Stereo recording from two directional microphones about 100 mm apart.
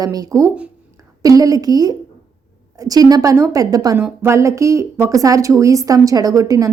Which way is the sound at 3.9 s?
25° right (ahead or behind).